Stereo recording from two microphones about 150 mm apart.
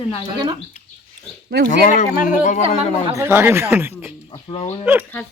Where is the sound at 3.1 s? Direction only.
15° right (ahead or behind).